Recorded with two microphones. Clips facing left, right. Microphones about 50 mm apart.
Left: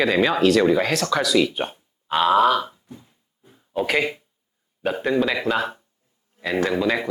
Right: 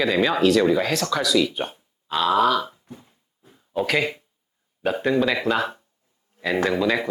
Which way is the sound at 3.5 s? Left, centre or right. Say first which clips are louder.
Even; centre.